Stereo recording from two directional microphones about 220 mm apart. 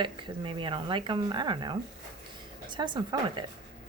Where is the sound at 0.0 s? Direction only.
20° right (ahead or behind).